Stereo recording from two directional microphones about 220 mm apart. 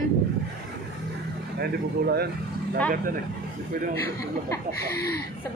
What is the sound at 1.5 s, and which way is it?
Speech, 45° right (ahead or behind).